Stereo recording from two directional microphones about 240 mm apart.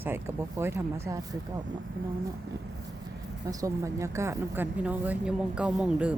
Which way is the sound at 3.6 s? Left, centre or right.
Centre.